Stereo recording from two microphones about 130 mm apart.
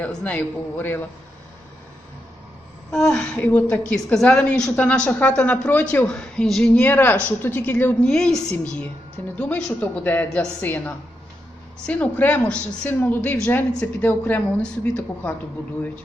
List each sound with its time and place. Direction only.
0.0 s a woman's voice: 10° left (ahead or behind)
2.9 s a woman's voice: 5° left (ahead or behind)